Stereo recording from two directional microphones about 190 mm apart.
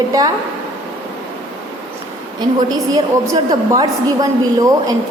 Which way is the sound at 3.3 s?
20° right (ahead or behind).